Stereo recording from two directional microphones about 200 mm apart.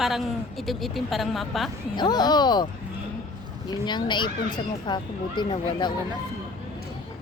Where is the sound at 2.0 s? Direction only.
20° left (ahead or behind).